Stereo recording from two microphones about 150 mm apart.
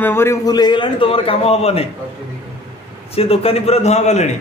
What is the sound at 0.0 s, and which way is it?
A man's voice, 15° left (ahead or behind).